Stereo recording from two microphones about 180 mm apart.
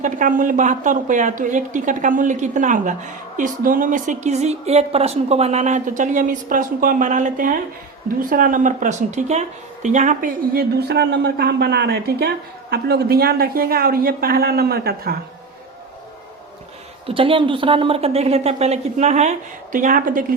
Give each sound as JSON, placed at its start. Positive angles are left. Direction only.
{"t": 0.0, "sound": "a woman's voice", "side_deg": -50}
{"t": 17.1, "sound": "a woman's voice", "side_deg": -30}